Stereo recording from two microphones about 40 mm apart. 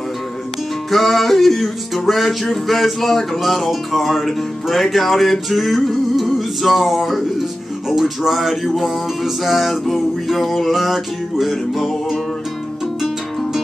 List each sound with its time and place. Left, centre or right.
0.8 s music: centre